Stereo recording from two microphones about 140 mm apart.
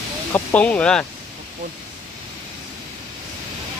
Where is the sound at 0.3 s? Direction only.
10° left (ahead or behind).